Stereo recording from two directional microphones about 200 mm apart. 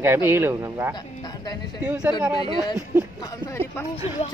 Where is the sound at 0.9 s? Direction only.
20° left (ahead or behind).